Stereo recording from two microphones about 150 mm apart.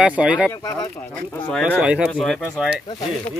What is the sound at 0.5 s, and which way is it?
Speech, 25° left (ahead or behind).